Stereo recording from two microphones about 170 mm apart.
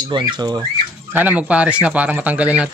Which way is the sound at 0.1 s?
25° right (ahead or behind).